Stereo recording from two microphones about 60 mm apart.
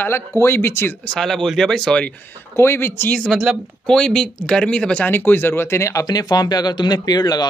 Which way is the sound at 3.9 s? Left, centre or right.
Centre.